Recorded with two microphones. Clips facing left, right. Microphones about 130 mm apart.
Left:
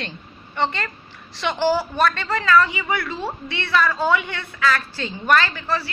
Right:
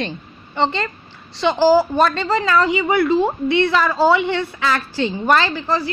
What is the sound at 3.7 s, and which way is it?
Speech, 35° right (ahead or behind).